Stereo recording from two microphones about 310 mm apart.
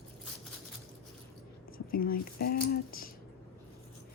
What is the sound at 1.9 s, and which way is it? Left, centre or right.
Speech, left.